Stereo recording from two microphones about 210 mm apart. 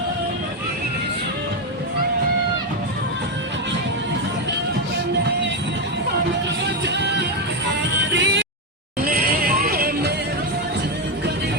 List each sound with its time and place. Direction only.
6.8 s music: 55° right (ahead or behind)
9.0 s music: 45° right (ahead or behind)